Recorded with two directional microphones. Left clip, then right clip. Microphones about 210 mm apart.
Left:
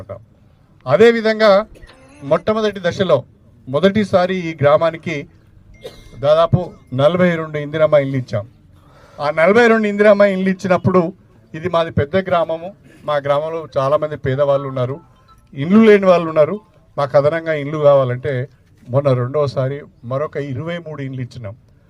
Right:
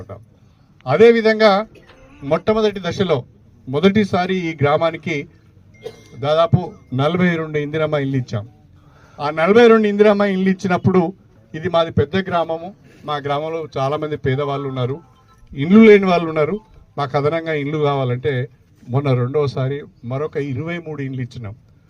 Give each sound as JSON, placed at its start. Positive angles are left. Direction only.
{"t": 0.9, "sound": "a man's voice", "side_deg": 25}
{"t": 1.9, "sound": "a sound", "side_deg": 45}
{"t": 2.2, "sound": "a man's voice", "side_deg": 25}